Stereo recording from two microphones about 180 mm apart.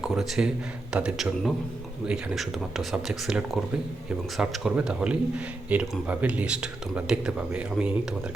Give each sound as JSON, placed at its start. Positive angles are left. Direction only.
{"t": 0.0, "sound": "speech", "side_deg": -5}